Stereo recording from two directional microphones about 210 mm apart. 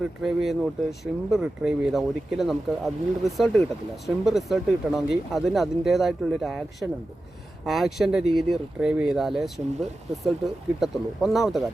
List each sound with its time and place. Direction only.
0.0 s speech: centre (ahead or behind)